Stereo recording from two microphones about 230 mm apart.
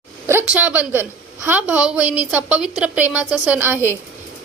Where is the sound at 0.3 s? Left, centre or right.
Centre.